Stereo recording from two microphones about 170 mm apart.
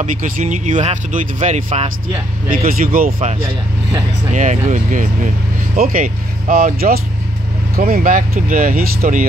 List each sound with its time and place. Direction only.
0.0 s speech: 45° right (ahead or behind)
2.8 s speech: 55° right (ahead or behind)
4.3 s speech: 45° right (ahead or behind)